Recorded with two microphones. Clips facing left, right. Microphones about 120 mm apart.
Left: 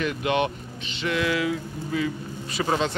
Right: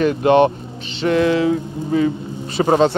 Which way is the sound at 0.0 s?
35° right (ahead or behind).